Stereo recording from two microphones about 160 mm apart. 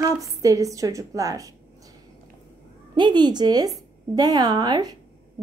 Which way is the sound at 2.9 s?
30° right (ahead or behind).